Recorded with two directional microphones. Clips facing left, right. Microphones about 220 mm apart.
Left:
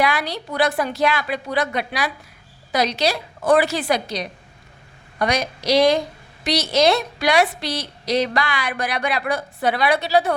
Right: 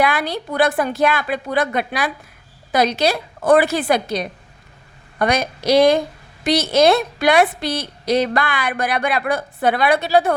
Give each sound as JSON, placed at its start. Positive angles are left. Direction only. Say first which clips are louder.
{"t": 0.0, "sound": "a woman's voice", "louder": "right 2 dB", "side_deg": -50}